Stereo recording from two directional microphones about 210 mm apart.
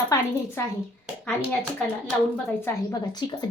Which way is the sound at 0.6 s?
10° left (ahead or behind).